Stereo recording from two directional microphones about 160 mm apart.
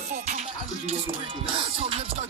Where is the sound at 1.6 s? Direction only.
35° right (ahead or behind).